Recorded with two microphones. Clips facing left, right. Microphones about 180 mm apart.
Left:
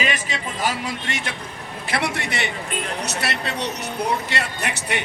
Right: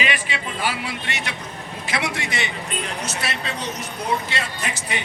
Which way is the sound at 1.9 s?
60° left (ahead or behind).